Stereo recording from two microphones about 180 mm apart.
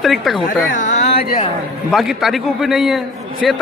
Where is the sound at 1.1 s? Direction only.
55° left (ahead or behind).